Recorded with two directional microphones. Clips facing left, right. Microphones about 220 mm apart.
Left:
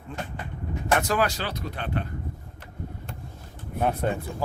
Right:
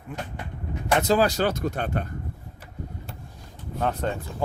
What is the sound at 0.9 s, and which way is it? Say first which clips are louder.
Speech: right 4 dB; 25° right (ahead or behind).